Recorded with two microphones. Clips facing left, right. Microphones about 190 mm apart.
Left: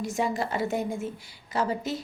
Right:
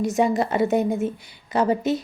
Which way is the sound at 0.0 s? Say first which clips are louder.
Right 8 dB; 20° right (ahead or behind).